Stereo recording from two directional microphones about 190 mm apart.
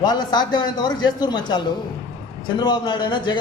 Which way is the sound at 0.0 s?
20° left (ahead or behind).